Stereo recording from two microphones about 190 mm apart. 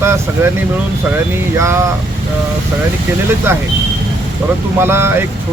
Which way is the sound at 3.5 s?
10° right (ahead or behind).